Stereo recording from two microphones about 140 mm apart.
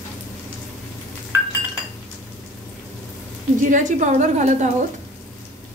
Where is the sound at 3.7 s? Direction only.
60° right (ahead or behind).